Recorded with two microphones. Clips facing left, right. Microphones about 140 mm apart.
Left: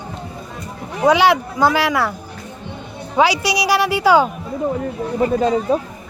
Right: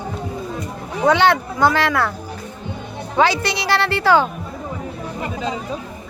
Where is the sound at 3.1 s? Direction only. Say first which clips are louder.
Left 2 dB; 10° left (ahead or behind).